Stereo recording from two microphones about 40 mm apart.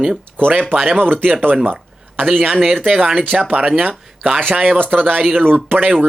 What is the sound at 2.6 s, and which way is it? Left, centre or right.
Speech, right.